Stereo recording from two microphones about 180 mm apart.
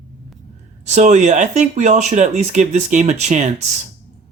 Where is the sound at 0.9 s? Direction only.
40° right (ahead or behind).